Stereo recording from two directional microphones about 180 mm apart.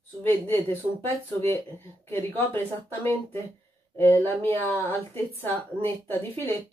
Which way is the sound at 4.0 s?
15° left (ahead or behind).